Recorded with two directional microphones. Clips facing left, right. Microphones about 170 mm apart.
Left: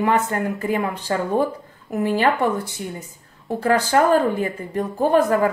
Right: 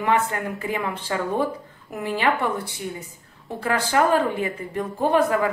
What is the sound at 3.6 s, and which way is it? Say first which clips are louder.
A woman's voice: left 4 dB; 45° left (ahead or behind).